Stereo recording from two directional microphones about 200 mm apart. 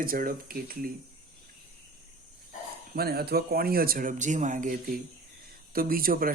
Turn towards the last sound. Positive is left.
turn(degrees=-45)  # may be behind; listen again after turning